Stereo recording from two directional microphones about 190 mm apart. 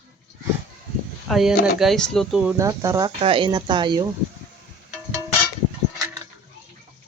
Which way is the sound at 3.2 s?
30° right (ahead or behind).